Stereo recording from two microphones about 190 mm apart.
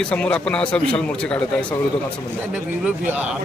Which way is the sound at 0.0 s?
5° left (ahead or behind).